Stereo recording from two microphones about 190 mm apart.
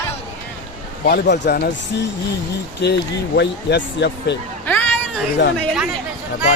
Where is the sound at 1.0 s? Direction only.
60° left (ahead or behind).